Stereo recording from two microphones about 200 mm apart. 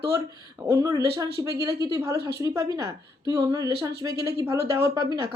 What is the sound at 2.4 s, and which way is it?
Speech, 20° right (ahead or behind).